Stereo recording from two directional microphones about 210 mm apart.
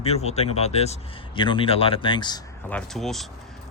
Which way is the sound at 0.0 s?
30° left (ahead or behind).